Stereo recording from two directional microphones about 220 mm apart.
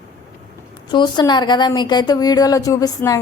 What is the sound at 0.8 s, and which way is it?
A woman's voice, 20° left (ahead or behind).